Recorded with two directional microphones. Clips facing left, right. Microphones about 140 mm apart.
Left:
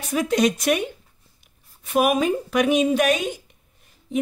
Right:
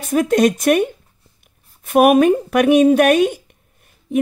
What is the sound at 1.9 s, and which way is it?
Speech, 60° right (ahead or behind).